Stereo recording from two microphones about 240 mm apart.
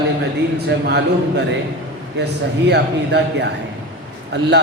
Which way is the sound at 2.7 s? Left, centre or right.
Right.